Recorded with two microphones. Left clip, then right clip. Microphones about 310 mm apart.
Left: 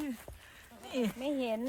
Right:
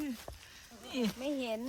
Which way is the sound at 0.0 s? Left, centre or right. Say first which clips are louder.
Even; centre.